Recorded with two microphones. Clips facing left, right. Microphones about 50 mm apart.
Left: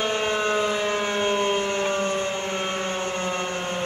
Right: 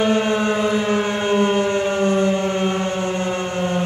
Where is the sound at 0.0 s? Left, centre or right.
Centre.